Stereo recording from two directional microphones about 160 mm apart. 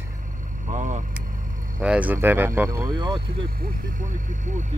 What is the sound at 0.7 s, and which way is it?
Vehicle, 50° right (ahead or behind).